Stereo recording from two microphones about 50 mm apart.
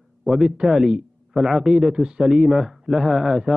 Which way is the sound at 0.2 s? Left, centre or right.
Centre.